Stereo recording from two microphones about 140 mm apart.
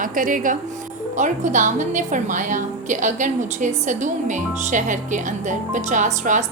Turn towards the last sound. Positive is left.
turn(degrees=-65)  # may be behind; listen again after turning